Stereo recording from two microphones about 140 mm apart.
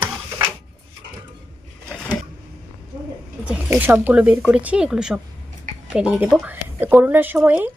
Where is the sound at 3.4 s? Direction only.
10° right (ahead or behind).